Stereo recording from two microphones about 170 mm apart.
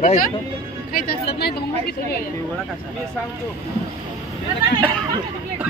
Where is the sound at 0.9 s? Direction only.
65° left (ahead or behind).